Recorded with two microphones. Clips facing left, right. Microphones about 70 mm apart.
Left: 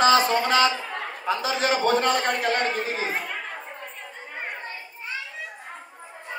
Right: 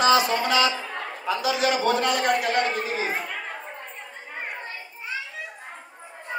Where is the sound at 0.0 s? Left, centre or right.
Left.